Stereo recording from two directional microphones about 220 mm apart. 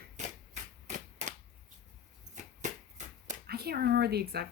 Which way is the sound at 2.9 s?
40° right (ahead or behind).